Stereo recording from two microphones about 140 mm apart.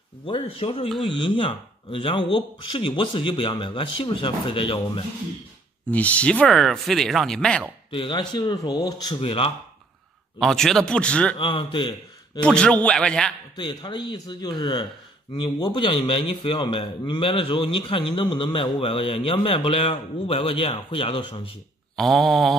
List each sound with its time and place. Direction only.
0.3 s a man's voice: 40° left (ahead or behind)
0.8 s speech: centre (ahead or behind)
1.2 s a man's voice: 40° left (ahead or behind)
5.9 s speech: 10° left (ahead or behind)
7.9 s a man's voice: 35° left (ahead or behind)
10.4 s speech: 5° left (ahead or behind)
11.3 s a man's voice: 40° left (ahead or behind)
12.4 s a man's voice: 5° left (ahead or behind)
13.6 s a man's voice: 30° left (ahead or behind)
21.9 s speech: centre (ahead or behind)